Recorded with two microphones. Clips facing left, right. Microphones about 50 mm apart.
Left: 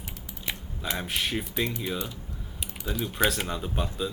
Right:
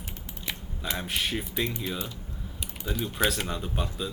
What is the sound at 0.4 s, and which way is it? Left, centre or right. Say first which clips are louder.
Speech: left 1 dB; centre.